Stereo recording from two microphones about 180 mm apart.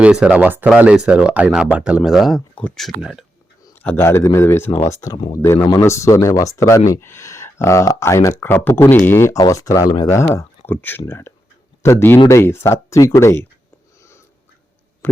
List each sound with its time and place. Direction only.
0.0 s speech: 5° right (ahead or behind)
3.8 s speech: 15° left (ahead or behind)
15.0 s a sound: 10° left (ahead or behind)